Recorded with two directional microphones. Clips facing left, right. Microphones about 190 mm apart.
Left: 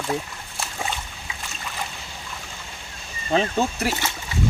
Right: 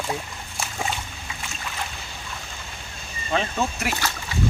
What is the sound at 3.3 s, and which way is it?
Speech, 35° left (ahead or behind).